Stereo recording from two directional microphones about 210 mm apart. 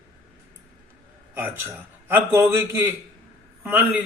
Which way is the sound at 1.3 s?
10° right (ahead or behind).